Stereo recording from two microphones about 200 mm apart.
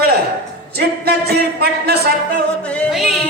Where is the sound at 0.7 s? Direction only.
55° right (ahead or behind).